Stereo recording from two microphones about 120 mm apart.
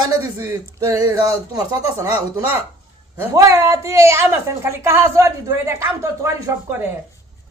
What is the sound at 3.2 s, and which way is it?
A man's voice, 25° right (ahead or behind).